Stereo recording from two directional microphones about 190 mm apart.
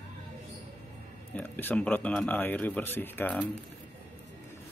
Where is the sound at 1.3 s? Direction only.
10° left (ahead or behind).